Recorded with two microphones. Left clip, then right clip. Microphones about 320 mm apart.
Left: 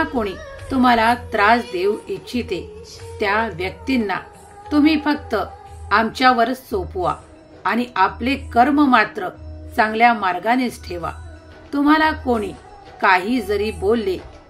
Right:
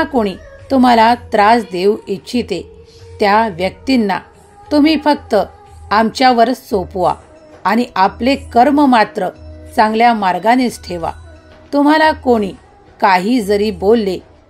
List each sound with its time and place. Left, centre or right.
0.0 s a woman's voice: right